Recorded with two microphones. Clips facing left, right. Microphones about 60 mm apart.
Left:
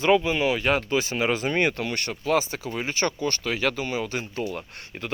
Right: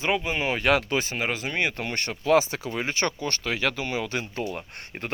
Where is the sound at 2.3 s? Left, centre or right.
Right.